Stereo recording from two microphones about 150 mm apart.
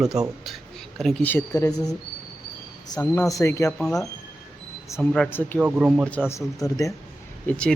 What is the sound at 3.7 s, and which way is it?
Speech, 5° left (ahead or behind).